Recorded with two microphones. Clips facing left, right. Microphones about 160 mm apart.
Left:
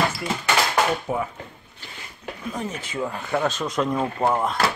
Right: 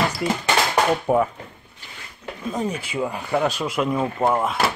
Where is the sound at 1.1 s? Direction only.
60° right (ahead or behind).